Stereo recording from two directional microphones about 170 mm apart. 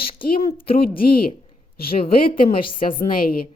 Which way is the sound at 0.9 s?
60° left (ahead or behind).